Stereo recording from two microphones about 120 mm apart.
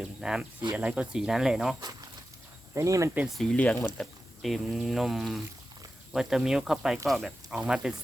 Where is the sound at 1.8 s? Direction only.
35° right (ahead or behind).